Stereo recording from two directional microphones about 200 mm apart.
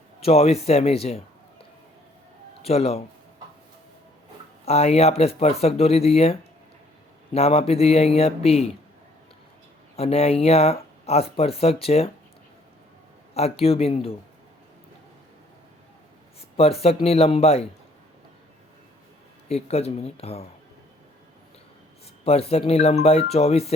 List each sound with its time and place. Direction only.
0.2 s speech: 30° left (ahead or behind)
2.6 s speech: 30° left (ahead or behind)
4.6 s speech: 30° left (ahead or behind)
7.3 s speech: 30° left (ahead or behind)
9.9 s speech: 30° left (ahead or behind)
13.3 s speech: 30° left (ahead or behind)
16.6 s speech: 30° left (ahead or behind)
19.5 s speech: 30° left (ahead or behind)
22.2 s speech: 30° left (ahead or behind)